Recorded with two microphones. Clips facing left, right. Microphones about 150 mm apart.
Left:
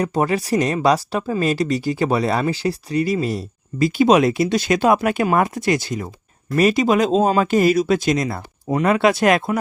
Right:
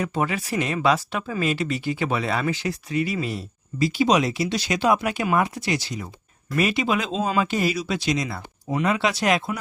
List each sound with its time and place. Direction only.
0.0 s speech: 40° left (ahead or behind)
3.8 s speech: 50° left (ahead or behind)